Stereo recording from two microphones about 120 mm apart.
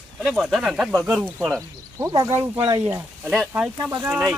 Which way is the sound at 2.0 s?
25° right (ahead or behind).